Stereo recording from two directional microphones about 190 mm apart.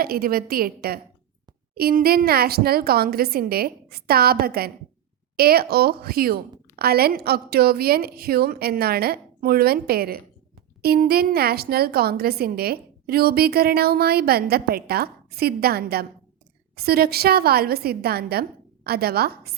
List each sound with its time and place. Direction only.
0.0 s a woman's voice: 50° right (ahead or behind)